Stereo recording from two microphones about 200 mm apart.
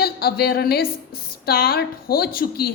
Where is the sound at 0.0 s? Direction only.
50° left (ahead or behind).